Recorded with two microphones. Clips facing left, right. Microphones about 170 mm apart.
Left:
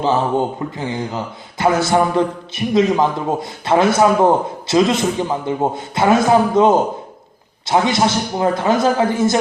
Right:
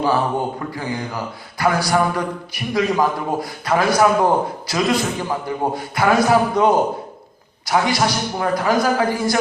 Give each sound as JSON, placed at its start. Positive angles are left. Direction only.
{"t": 0.0, "sound": "a man's voice", "side_deg": 20}